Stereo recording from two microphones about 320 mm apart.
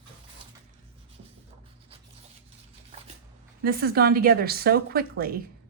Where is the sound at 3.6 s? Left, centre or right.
Right.